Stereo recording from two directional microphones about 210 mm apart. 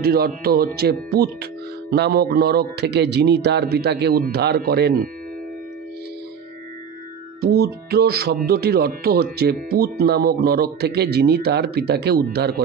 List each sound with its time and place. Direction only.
0.0 s speech: 50° right (ahead or behind)
7.3 s speech: 50° right (ahead or behind)